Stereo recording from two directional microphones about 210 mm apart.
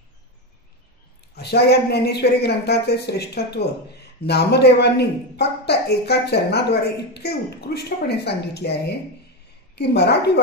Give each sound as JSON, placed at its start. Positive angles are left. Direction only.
{"t": 1.3, "sound": "speech", "side_deg": 50}